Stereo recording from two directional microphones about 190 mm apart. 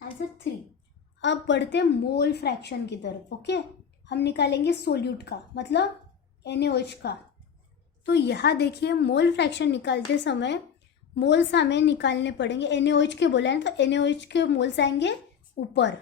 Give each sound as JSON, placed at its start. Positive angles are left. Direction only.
{"t": 0.2, "sound": "a woman's voice", "side_deg": 60}